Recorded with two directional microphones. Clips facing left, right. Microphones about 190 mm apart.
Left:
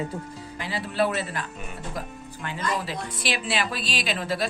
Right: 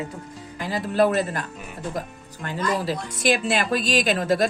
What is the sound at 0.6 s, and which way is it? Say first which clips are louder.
Speech: right 5 dB; 45° right (ahead or behind).